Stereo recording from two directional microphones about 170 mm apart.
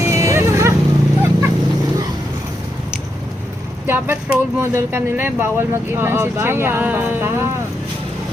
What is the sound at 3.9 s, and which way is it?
Speech, 15° right (ahead or behind).